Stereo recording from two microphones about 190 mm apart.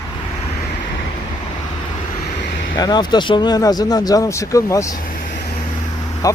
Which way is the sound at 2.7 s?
20° left (ahead or behind).